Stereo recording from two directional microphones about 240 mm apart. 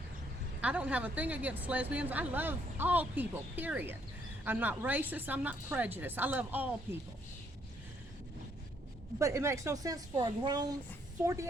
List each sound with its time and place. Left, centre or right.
0.6 s a woman's voice: centre
9.1 s a woman's voice: centre